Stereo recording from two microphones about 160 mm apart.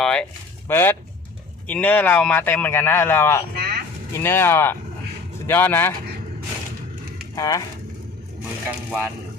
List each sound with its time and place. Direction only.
0.0 s a man's voice: 5° left (ahead or behind)
3.5 s vehicle: 75° right (ahead or behind)
4.1 s a man's voice: 15° left (ahead or behind)
7.3 s speech: 20° left (ahead or behind)